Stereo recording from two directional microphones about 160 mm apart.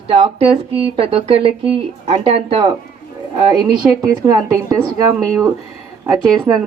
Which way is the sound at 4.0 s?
20° right (ahead or behind).